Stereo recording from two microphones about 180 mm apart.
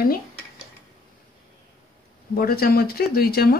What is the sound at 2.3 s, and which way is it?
Speech, 55° left (ahead or behind).